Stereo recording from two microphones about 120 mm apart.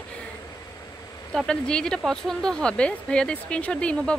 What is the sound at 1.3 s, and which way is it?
Speech, 5° left (ahead or behind).